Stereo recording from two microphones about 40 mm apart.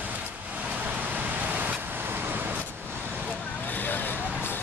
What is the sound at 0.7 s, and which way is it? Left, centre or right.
Vehicle, right.